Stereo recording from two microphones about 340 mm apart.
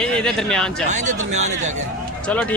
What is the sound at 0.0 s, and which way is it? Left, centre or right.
Speech, centre.